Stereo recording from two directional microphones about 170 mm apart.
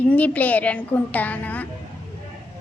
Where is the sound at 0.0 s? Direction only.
10° left (ahead or behind).